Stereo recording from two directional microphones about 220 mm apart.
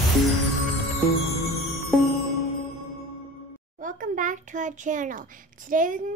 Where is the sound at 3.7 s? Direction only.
35° right (ahead or behind).